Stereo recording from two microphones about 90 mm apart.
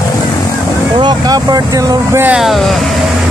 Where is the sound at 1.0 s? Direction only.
50° right (ahead or behind).